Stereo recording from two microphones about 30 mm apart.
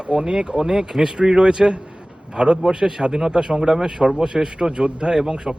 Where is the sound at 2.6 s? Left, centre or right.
Right.